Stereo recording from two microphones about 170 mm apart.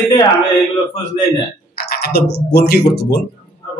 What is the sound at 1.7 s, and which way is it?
Speech, 65° left (ahead or behind).